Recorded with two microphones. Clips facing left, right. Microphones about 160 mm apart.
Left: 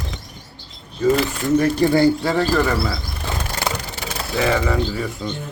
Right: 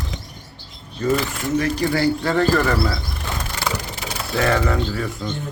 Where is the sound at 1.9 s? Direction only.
15° left (ahead or behind).